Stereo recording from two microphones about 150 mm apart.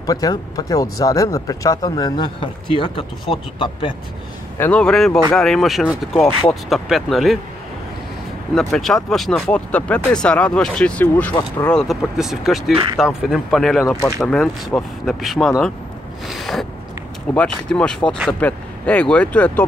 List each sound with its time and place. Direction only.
0.0 s speech: 25° left (ahead or behind)
4.6 s speech: 10° left (ahead or behind)
8.7 s speech: centre (ahead or behind)
11.9 s speech: 5° right (ahead or behind)
16.3 s a sound: centre (ahead or behind)
17.3 s speech: 10° left (ahead or behind)